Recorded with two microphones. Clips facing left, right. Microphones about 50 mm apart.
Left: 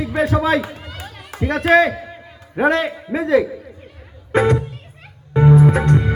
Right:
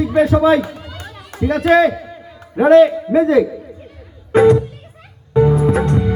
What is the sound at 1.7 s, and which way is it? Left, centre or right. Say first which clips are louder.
A man's voice: right 1 dB; left.